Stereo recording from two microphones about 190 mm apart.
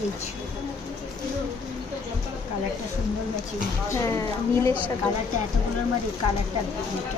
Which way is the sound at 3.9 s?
15° left (ahead or behind).